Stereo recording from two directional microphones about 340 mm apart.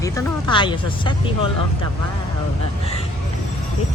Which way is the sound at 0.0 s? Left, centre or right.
Centre.